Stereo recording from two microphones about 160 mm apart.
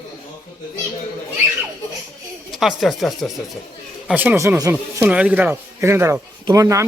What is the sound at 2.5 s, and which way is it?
Speech, centre (ahead or behind).